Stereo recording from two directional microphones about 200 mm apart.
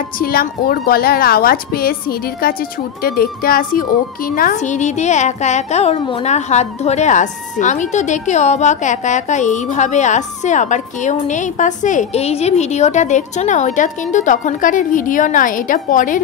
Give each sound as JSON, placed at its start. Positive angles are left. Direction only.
{"t": 0.2, "sound": "a woman's voice", "side_deg": 50}